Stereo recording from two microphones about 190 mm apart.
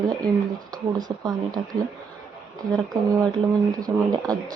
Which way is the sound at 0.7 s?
20° right (ahead or behind).